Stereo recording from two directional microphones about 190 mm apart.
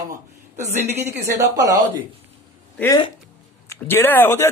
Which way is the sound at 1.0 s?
15° right (ahead or behind).